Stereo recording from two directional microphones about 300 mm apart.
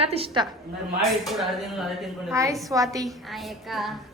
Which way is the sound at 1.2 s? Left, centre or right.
Centre.